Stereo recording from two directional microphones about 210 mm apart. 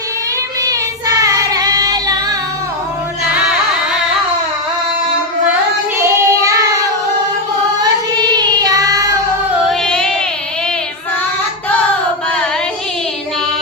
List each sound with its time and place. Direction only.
1.2 s child singing: 15° right (ahead or behind)
6.0 s child singing: 15° right (ahead or behind)
7.8 s child singing: 20° right (ahead or behind)
9.6 s music: 5° left (ahead or behind)